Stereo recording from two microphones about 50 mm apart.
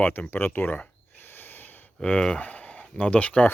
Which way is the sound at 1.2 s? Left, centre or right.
Left.